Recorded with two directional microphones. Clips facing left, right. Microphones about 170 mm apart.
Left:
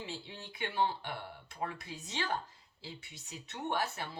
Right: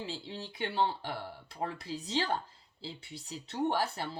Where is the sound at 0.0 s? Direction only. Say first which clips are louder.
Right 4 dB; 35° right (ahead or behind).